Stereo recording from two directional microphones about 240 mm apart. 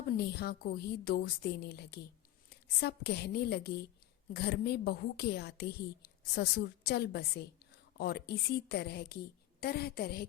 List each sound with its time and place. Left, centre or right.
0.2 s a woman's voice: left